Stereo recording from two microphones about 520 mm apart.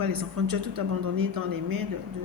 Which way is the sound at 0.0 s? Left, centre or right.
Right.